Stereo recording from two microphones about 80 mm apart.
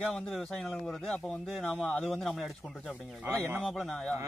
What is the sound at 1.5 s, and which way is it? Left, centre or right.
Speech, centre.